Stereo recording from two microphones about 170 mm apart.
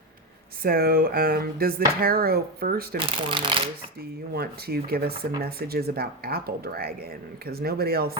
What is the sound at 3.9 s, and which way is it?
Speech, 65° right (ahead or behind).